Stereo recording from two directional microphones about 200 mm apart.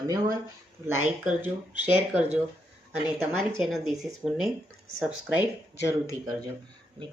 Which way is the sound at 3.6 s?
Centre (ahead or behind).